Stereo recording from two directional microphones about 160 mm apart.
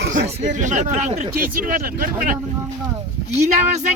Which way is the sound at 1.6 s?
60° right (ahead or behind).